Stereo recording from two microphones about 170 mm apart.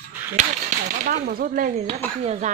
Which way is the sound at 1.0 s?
55° right (ahead or behind).